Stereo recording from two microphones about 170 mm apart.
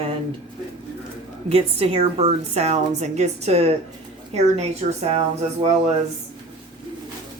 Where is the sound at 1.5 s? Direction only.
35° right (ahead or behind).